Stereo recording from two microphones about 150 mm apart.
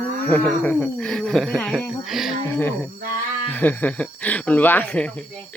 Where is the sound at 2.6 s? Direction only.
10° left (ahead or behind).